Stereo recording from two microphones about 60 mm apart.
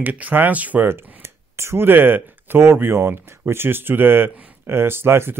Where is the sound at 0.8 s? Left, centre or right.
Right.